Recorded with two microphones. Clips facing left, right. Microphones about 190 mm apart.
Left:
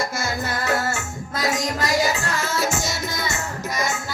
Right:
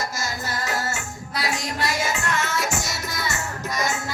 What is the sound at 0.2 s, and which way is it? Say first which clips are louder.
Music: left 3 dB; 60° left (ahead or behind).